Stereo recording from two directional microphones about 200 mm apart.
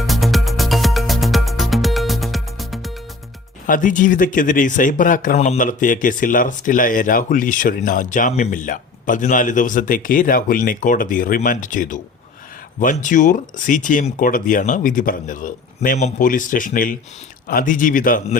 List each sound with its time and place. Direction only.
0.1 s music: centre (ahead or behind)
3.7 s a man's voice: 40° left (ahead or behind)